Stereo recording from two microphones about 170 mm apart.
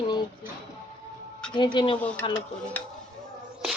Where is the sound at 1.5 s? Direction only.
25° left (ahead or behind).